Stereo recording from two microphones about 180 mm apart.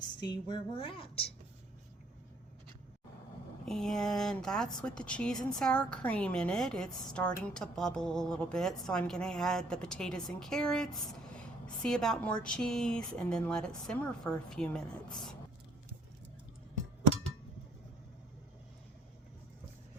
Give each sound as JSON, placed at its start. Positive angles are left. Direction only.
{"t": 0.2, "sound": "a woman's voice", "side_deg": 25}
{"t": 3.7, "sound": "speech", "side_deg": 0}